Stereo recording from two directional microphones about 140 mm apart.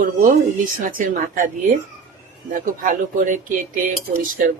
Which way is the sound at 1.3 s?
65° right (ahead or behind).